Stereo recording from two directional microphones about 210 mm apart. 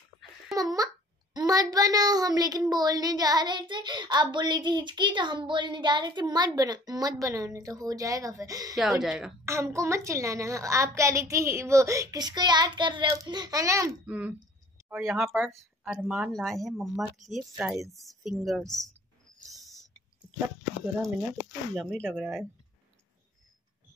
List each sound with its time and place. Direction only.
0.6 s a child's voice: 15° right (ahead or behind)
1.3 s child singing: 15° right (ahead or behind)
8.7 s speech: centre (ahead or behind)
9.4 s child singing: 15° right (ahead or behind)
14.9 s speech: 5° right (ahead or behind)
19.4 s a sound: centre (ahead or behind)
21.7 s speech: 5° left (ahead or behind)